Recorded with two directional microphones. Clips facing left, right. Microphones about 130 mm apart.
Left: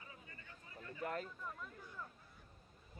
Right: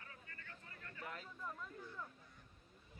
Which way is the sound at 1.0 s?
45° left (ahead or behind).